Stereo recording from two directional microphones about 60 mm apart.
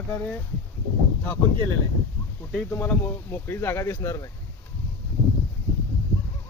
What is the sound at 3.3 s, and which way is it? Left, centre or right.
Speech, left.